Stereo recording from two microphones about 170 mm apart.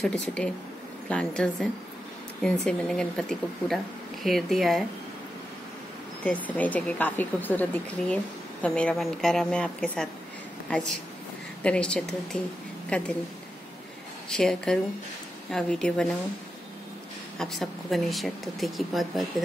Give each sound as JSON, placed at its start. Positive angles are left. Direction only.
{"t": 0.0, "sound": "speech", "side_deg": 5}
{"t": 6.2, "sound": "speech", "side_deg": 10}
{"t": 14.3, "sound": "speech", "side_deg": 5}
{"t": 17.4, "sound": "speech", "side_deg": 0}